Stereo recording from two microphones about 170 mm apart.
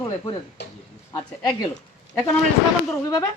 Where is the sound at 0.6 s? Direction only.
90° left.